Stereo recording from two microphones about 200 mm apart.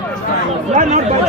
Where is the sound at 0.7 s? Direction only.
40° right (ahead or behind).